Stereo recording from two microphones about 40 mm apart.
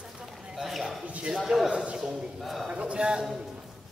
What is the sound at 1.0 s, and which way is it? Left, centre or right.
Speech, right.